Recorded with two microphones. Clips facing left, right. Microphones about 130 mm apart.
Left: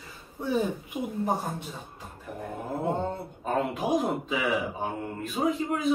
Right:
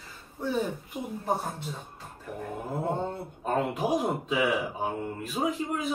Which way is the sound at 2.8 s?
Centre (ahead or behind).